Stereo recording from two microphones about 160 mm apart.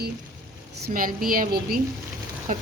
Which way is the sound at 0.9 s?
60° right (ahead or behind).